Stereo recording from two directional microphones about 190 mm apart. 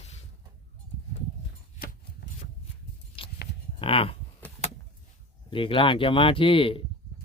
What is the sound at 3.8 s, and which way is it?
Speech, 30° left (ahead or behind).